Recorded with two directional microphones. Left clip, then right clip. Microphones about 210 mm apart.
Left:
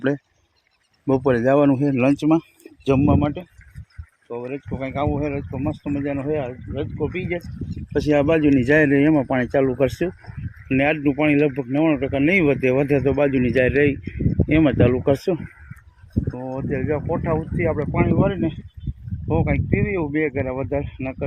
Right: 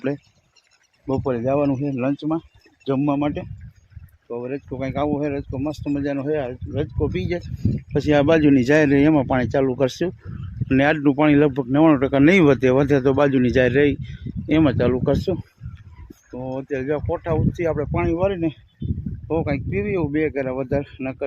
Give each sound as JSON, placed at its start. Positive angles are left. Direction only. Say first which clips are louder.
{"t": 1.0, "sound": "speech", "louder": "left 4 dB", "side_deg": 20}
{"t": 3.2, "sound": "speech", "louder": "even", "side_deg": -25}
{"t": 16.5, "sound": "speech", "louder": "right 1 dB", "side_deg": -10}